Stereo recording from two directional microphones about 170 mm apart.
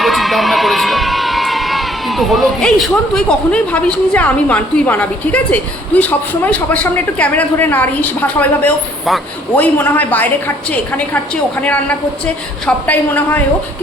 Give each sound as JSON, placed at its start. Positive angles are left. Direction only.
{"t": 0.0, "sound": "speech", "side_deg": 0}